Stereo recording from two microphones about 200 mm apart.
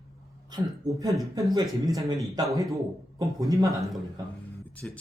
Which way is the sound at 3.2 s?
15° right (ahead or behind).